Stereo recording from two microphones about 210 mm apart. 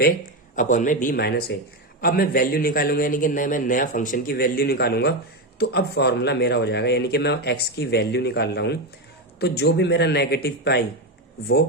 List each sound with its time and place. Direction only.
0.5 s speech: 40° left (ahead or behind)